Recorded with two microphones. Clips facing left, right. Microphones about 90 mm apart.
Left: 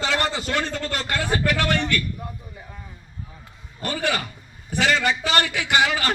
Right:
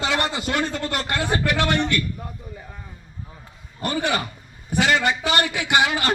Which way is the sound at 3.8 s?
25° right (ahead or behind).